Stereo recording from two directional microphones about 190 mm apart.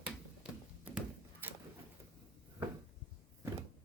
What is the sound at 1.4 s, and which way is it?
Pigeon, 10° right (ahead or behind).